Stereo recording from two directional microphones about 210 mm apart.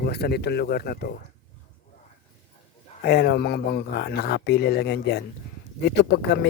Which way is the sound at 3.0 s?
50° left (ahead or behind).